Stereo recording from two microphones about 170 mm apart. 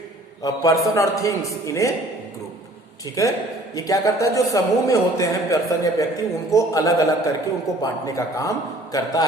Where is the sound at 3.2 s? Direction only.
20° left (ahead or behind).